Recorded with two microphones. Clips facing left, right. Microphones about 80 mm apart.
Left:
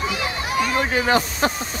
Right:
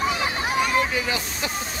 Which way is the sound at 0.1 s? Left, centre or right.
Right.